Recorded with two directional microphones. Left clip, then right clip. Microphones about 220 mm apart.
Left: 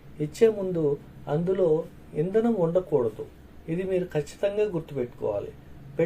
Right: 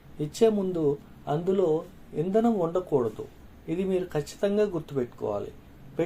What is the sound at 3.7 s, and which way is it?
Speech, 20° right (ahead or behind).